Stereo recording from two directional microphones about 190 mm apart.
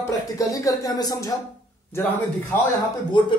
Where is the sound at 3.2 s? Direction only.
25° left (ahead or behind).